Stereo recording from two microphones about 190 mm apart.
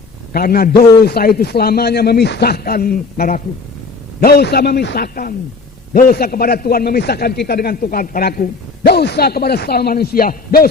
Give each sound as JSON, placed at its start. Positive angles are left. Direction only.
{"t": 0.3, "sound": "a man's voice", "side_deg": 50}